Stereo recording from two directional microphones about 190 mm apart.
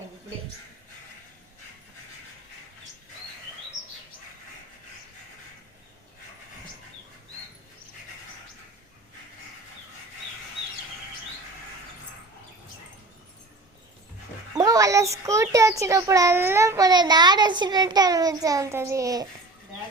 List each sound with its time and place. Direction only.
14.6 s a child's voice: 20° right (ahead or behind)